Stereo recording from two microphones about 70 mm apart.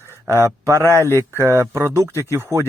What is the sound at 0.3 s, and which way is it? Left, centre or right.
Speech, right.